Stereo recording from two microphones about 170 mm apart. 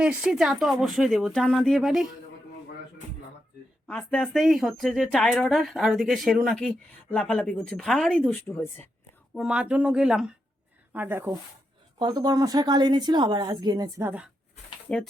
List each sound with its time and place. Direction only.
0.0 s speech: 5° right (ahead or behind)
3.8 s speech: 10° left (ahead or behind)
9.3 s speech: 5° right (ahead or behind)
11.9 s a woman's voice: 25° right (ahead or behind)
14.9 s speech: 5° left (ahead or behind)